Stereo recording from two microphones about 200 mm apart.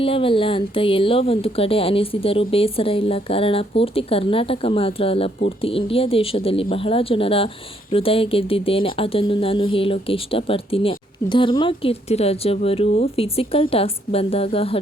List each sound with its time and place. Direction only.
0.0 s speech: 25° left (ahead or behind)